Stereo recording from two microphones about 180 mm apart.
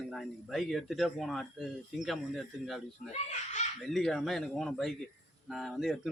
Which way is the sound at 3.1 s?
40° left (ahead or behind).